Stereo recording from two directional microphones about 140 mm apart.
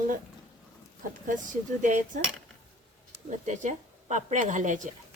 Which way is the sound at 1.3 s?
65° right (ahead or behind).